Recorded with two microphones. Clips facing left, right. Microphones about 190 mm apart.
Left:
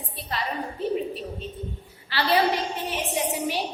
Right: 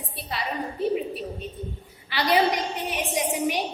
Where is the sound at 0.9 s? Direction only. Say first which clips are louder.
Even; 10° right (ahead or behind).